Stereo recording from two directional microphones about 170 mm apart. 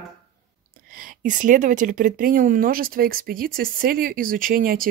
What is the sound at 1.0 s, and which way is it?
Speech, 50° right (ahead or behind).